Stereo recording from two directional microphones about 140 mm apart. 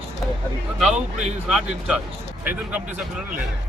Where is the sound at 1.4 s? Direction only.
Centre (ahead or behind).